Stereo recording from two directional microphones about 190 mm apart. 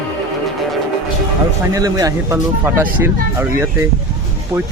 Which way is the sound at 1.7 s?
20° right (ahead or behind).